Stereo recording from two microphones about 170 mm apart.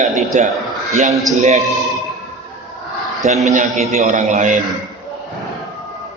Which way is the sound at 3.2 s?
45° right (ahead or behind).